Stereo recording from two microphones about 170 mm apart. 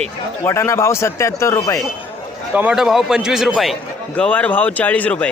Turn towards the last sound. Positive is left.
turn(degrees=10)  # may be behind; listen again after turning